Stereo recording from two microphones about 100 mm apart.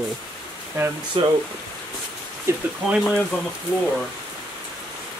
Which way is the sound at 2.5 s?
25° right (ahead or behind).